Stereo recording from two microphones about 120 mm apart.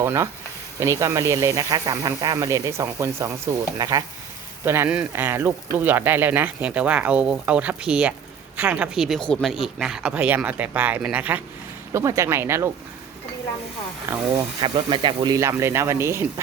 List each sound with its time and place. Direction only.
0.0 s speech: 20° right (ahead or behind)
11.9 s speech: 25° right (ahead or behind)
14.6 s speech: 45° right (ahead or behind); by 16.2 s 20° right (ahead or behind)